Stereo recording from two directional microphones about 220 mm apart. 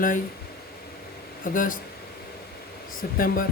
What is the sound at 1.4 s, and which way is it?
Speech, 35° left (ahead or behind).